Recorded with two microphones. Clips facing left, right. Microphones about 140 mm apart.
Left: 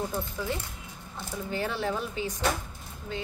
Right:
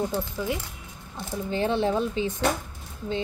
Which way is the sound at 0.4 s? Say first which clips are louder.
Right 3 dB; 15° right (ahead or behind).